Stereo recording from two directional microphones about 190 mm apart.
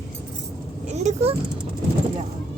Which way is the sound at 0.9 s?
35° right (ahead or behind).